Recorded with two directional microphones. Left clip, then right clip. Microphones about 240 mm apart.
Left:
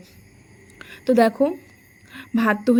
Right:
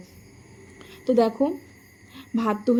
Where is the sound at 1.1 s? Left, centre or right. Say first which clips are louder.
Left 4 dB; left.